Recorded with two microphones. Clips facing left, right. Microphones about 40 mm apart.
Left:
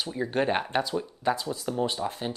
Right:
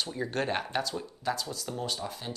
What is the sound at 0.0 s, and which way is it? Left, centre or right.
Speech, centre.